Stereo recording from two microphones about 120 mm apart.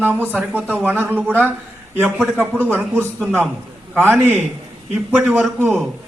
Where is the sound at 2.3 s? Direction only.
20° right (ahead or behind).